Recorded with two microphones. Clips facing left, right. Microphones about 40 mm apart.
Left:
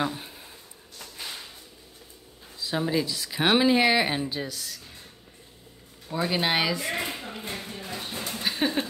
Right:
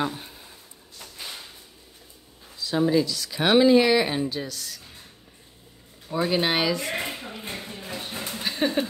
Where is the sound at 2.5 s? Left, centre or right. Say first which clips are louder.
Right 3 dB; centre.